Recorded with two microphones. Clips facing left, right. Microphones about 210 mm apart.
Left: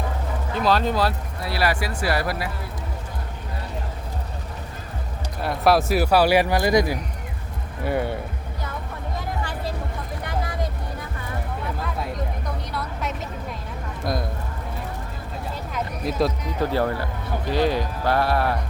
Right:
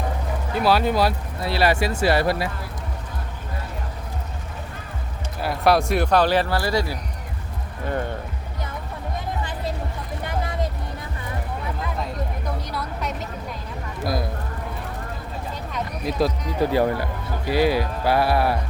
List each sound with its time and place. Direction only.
0.6 s speech: 10° right (ahead or behind)
1.5 s speech: 25° right (ahead or behind)
5.4 s speech: centre (ahead or behind)
12.7 s a sound: centre (ahead or behind)
15.7 s a sound: centre (ahead or behind)
16.6 s speech: 15° right (ahead or behind)